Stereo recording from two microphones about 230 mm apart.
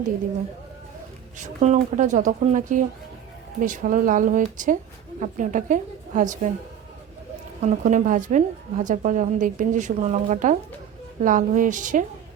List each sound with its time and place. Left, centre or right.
1.4 s a woman's voice: right
7.6 s a woman's voice: right